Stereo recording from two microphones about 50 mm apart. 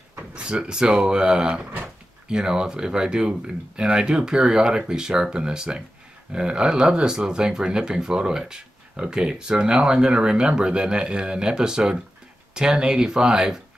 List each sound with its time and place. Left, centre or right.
0.3 s speech: centre